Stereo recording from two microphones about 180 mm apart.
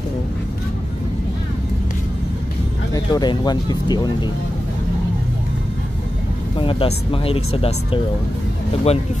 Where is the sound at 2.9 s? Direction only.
25° left (ahead or behind).